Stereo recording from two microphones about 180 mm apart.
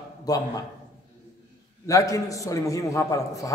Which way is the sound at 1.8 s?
20° left (ahead or behind).